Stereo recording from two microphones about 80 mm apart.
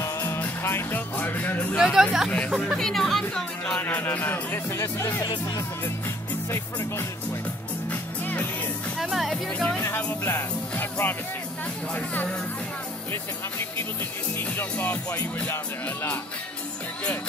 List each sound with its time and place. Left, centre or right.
0.4 s speech: left
1.8 s speech: centre
2.2 s speech: centre
3.8 s speech: left
5.6 s music: left
8.9 s music: centre
9.5 s speech: centre
9.8 s speech: left
14.3 s speech: left